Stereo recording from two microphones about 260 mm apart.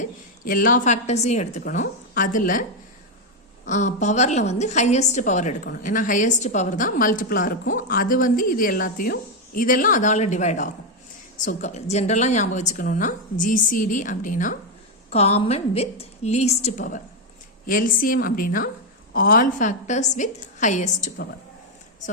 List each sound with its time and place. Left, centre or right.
0.0 s a woman's voice: left
3.7 s a woman's voice: left